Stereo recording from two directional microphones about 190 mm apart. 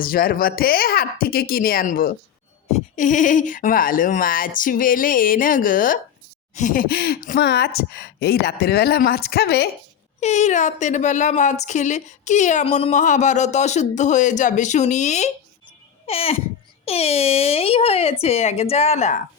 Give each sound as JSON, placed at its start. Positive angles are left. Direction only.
{"t": 0.0, "sound": "speech", "side_deg": 50}
{"t": 10.2, "sound": "a woman's voice", "side_deg": 35}